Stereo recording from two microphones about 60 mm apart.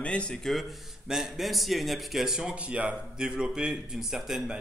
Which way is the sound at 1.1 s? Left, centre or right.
Centre.